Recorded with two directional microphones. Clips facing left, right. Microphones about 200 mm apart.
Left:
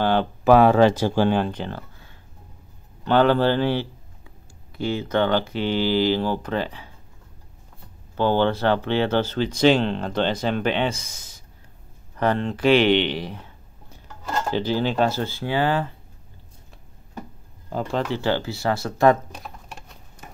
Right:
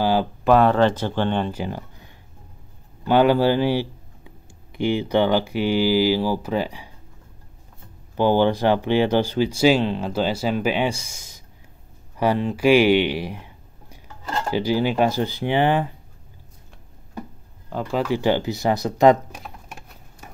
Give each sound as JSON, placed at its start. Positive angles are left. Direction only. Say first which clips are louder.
{"t": 0.0, "sound": "speech", "louder": "right 1 dB", "side_deg": -5}
{"t": 0.4, "sound": "speech", "louder": "left 2 dB", "side_deg": 5}
{"t": 1.5, "sound": "speech", "louder": "right 2 dB", "side_deg": -10}
{"t": 8.2, "sound": "speech", "louder": "right 2 dB", "side_deg": -15}
{"t": 17.7, "sound": "speech", "louder": "right 2 dB", "side_deg": -10}
{"t": 19.4, "sound": "a sound", "louder": "even", "side_deg": -5}